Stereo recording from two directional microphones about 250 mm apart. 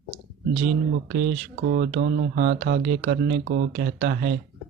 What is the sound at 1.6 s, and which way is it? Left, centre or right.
Speech, right.